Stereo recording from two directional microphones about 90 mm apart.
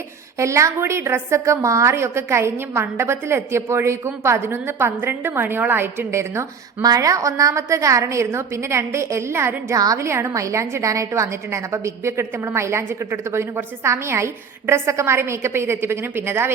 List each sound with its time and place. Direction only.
0.3 s a woman's voice: 35° right (ahead or behind)
6.8 s a woman's voice: 40° right (ahead or behind)
9.7 s a woman's voice: 40° right (ahead or behind); by 16.5 s 25° right (ahead or behind)